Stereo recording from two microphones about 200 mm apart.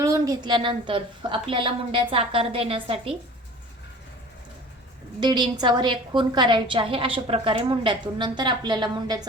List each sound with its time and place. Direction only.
0.0 s a woman's voice: 15° right (ahead or behind)
5.2 s a woman's voice: 20° right (ahead or behind)